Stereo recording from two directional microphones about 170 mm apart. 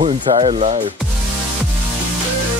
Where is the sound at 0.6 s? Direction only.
40° right (ahead or behind).